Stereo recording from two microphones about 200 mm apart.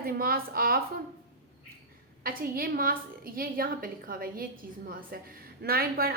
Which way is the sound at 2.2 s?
45° right (ahead or behind).